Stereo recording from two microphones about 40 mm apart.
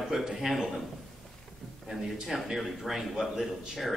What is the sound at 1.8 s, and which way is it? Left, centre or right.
A man's voice, centre.